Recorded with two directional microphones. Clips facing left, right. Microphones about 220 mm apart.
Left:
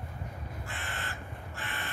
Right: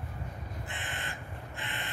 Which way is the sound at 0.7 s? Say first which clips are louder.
Left 1 dB; 20° right (ahead or behind).